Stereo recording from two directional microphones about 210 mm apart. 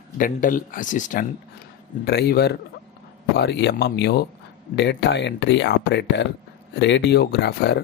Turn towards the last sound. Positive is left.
turn(degrees=50)  # may be behind; listen again after turning